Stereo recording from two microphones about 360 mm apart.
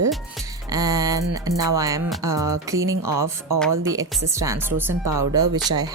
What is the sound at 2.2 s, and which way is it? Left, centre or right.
Speech, right.